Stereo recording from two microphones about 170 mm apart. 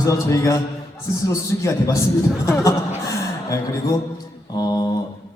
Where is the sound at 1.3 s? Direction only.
20° left (ahead or behind).